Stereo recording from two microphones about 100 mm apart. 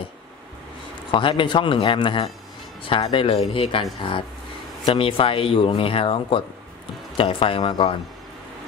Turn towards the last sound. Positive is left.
turn(degrees=65)  # may be behind; listen again after turning